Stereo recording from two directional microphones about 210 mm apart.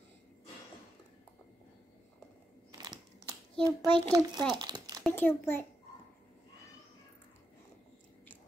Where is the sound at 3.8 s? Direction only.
5° left (ahead or behind).